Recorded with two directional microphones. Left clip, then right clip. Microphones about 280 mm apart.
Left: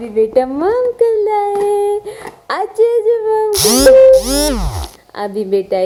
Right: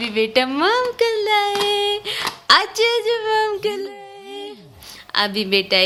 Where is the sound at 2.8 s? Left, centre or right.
Centre.